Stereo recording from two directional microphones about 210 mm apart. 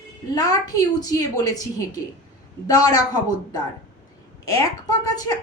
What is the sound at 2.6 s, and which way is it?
Speech, 20° left (ahead or behind).